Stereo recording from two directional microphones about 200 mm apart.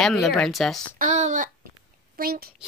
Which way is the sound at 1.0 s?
35° right (ahead or behind).